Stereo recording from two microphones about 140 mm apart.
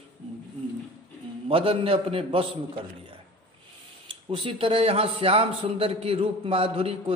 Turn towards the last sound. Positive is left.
turn(degrees=-40)  # may be behind; listen again after turning